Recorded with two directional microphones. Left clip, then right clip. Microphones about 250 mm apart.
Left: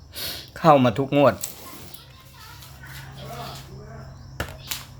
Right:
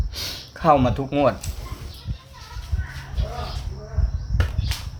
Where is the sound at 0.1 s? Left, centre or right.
Centre.